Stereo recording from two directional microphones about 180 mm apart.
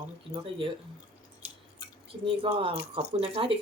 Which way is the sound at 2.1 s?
30° right (ahead or behind).